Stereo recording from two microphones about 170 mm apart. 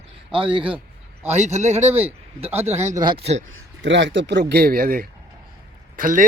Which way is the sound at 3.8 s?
90° right.